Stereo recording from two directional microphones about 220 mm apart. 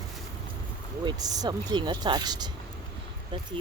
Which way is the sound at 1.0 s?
15° right (ahead or behind).